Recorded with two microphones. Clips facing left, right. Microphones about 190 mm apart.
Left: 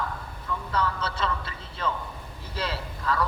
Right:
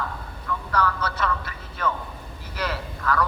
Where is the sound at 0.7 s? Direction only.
25° left (ahead or behind).